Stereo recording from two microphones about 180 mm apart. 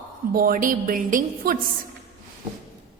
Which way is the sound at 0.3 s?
50° right (ahead or behind).